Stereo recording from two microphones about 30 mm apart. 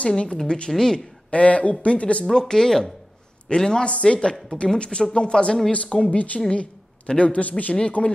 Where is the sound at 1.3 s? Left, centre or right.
Left.